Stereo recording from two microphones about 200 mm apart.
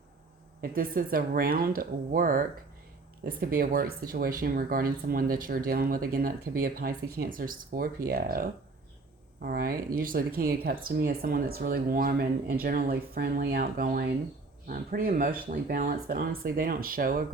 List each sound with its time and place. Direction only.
0.6 s speech: 45° right (ahead or behind)